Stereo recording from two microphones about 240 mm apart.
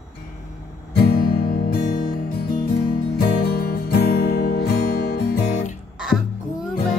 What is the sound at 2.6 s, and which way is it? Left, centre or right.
Music, centre.